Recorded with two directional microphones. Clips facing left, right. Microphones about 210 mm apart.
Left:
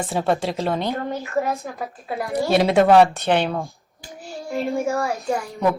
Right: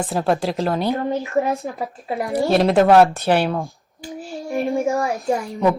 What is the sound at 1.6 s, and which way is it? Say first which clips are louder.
Speech: right 3 dB; 20° right (ahead or behind).